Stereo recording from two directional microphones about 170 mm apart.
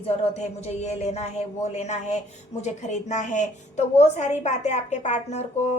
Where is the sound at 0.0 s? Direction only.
40° left (ahead or behind).